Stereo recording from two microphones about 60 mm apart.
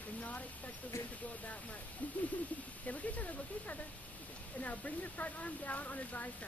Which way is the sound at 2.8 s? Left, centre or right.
Left.